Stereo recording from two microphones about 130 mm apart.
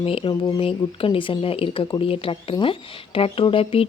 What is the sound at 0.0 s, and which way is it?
Speech, 45° left (ahead or behind).